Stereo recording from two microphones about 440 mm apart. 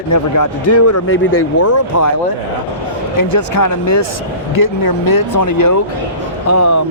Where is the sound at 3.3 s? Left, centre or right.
Left.